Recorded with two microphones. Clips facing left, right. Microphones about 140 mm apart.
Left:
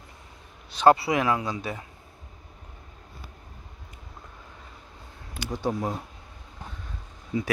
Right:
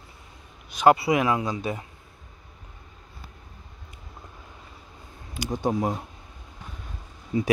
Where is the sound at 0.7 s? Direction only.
15° right (ahead or behind).